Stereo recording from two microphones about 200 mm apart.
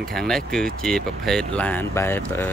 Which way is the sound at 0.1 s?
Centre (ahead or behind).